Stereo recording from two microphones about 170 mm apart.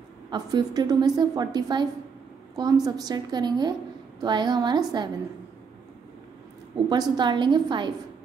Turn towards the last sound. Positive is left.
turn(degrees=-25)  # may be behind; listen again after turning